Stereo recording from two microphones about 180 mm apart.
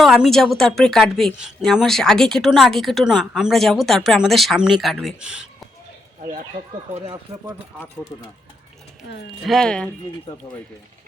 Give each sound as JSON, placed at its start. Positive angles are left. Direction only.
{"t": 0.0, "sound": "speech", "side_deg": 0}
{"t": 7.0, "sound": "speech", "side_deg": -30}
{"t": 9.4, "sound": "speech", "side_deg": 0}